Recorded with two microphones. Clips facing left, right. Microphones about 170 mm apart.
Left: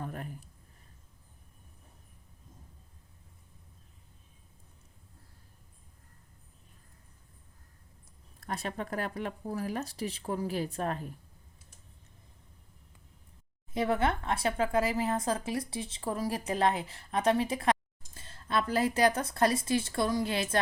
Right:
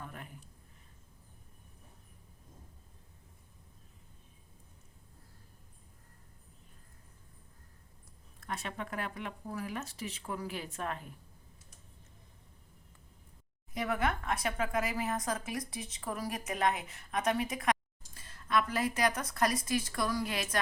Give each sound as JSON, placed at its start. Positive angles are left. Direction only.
{"t": 0.0, "sound": "a sound", "side_deg": 40}
{"t": 8.4, "sound": "speech", "side_deg": 35}
{"t": 13.7, "sound": "speech", "side_deg": 30}